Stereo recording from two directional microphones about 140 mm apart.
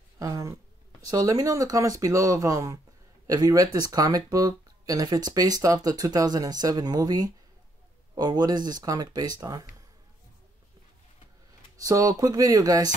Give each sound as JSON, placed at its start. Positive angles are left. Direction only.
{"t": 0.2, "sound": "a sound", "side_deg": -25}
{"t": 1.0, "sound": "speech", "side_deg": -25}
{"t": 11.8, "sound": "speech", "side_deg": -25}